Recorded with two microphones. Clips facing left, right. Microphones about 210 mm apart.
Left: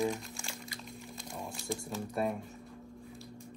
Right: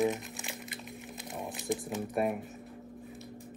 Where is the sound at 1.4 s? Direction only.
20° right (ahead or behind).